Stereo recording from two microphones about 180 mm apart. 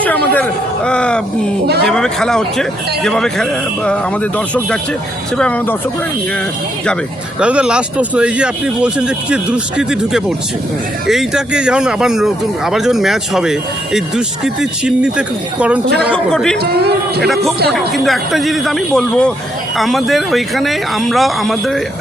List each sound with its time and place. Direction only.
0.9 s speech: 5° left (ahead or behind)
1.6 s a man's voice: 65° right (ahead or behind)
1.9 s speech: 5° left (ahead or behind)
7.3 s speech: 5° right (ahead or behind)
16.1 s speech: 5° left (ahead or behind)
16.6 s a man's voice: 60° right (ahead or behind)
17.2 s speech: centre (ahead or behind)